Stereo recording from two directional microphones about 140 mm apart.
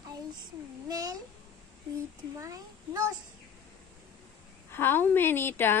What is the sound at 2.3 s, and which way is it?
Speech, 20° right (ahead or behind).